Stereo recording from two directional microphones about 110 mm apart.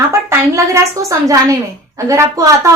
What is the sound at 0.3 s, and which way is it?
A woman's voice, 25° right (ahead or behind).